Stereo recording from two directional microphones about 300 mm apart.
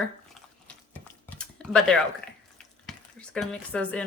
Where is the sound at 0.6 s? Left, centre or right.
Centre.